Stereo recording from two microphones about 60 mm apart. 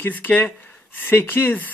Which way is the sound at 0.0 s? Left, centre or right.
Left.